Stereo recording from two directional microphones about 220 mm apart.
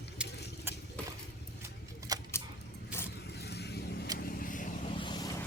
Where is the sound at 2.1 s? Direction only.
15° right (ahead or behind).